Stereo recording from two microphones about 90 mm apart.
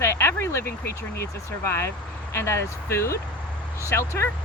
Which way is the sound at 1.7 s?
30° left (ahead or behind).